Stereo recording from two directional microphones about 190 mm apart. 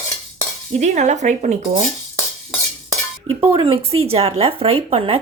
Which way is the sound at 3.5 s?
30° right (ahead or behind).